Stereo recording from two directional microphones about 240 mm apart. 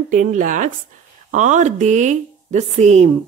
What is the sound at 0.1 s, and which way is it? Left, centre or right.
Speech, right.